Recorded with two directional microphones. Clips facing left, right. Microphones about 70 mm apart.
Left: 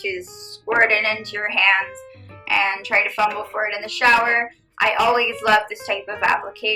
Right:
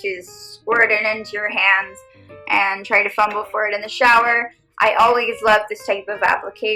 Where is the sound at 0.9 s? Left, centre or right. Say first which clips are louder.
Right 2 dB; right.